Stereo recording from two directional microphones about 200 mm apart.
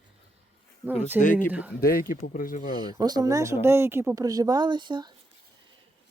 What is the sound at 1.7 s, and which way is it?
Speech, 50° left (ahead or behind).